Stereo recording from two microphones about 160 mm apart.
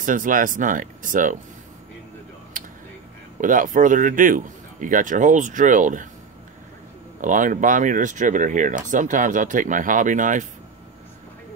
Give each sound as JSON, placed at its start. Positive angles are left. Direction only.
{"t": 0.0, "sound": "a man's voice", "side_deg": -55}
{"t": 2.6, "sound": "a sound", "side_deg": -55}
{"t": 3.3, "sound": "a man's voice", "side_deg": -55}
{"t": 7.2, "sound": "speech", "side_deg": -55}